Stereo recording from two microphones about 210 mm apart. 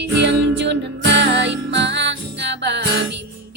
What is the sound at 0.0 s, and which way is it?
Music, 55° right (ahead or behind).